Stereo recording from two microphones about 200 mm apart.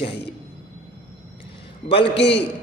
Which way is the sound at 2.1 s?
60° left (ahead or behind).